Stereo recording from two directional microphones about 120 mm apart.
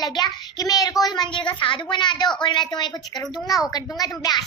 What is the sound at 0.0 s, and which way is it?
A child's voice, 35° left (ahead or behind).